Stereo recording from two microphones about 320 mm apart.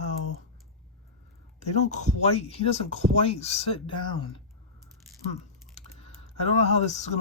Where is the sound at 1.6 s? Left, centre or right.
Left.